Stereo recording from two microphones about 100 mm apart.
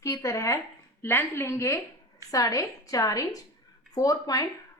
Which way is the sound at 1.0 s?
20° left (ahead or behind).